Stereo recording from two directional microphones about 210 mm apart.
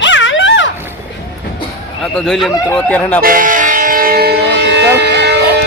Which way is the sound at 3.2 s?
40° right (ahead or behind).